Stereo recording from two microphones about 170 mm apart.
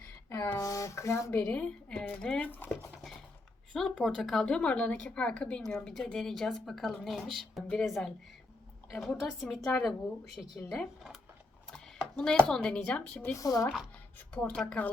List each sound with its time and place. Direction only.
0.3 s a sound: 15° left (ahead or behind)
3.7 s a woman's voice: 5° left (ahead or behind)
11.7 s a sound: 5° left (ahead or behind)
12.5 s speech: 5° left (ahead or behind)
13.4 s speech: 20° left (ahead or behind)
14.3 s speech: 5° left (ahead or behind)